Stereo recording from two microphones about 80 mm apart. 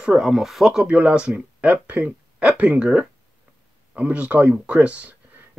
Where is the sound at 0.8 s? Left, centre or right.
Centre.